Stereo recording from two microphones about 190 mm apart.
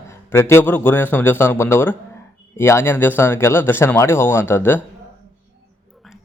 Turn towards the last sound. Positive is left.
turn(degrees=10)  # may be behind; listen again after turning